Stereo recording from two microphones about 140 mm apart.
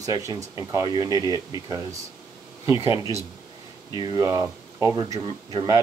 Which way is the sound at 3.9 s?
25° right (ahead or behind).